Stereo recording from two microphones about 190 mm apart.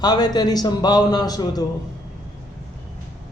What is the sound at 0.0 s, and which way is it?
A man's voice, 20° left (ahead or behind).